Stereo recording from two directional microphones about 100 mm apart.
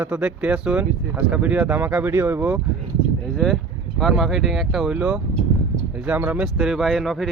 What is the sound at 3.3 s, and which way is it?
Speech, 5° left (ahead or behind).